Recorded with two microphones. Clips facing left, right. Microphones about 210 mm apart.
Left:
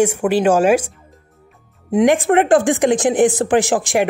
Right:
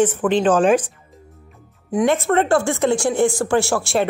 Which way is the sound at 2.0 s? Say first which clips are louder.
Left 4 dB; 15° left (ahead or behind).